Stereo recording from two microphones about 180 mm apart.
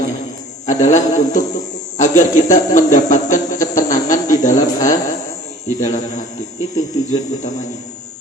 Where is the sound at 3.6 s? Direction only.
20° left (ahead or behind).